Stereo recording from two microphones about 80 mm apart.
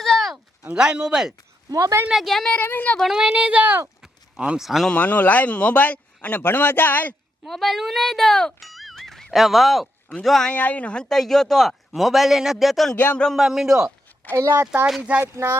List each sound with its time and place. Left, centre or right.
0.0 s a sound: centre
0.7 s speech: centre
1.7 s a woman's voice: right
2.0 s a man's voice: centre
2.5 s speech: left
3.0 s speech: centre
4.0 s a sound: centre
4.9 s speech: left
7.4 s a man's voice: centre
10.5 s a man's voice: centre
14.3 s speech: right